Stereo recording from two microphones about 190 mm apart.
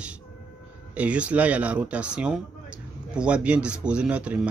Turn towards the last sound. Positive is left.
turn(degrees=-5)  # may be behind; listen again after turning